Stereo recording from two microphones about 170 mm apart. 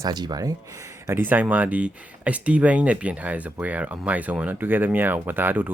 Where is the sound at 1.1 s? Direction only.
10° right (ahead or behind).